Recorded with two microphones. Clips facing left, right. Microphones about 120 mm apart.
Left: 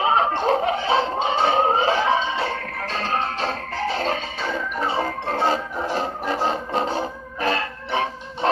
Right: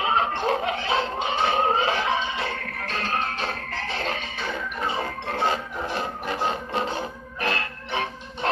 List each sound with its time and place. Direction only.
0.0 s music: 35° left (ahead or behind)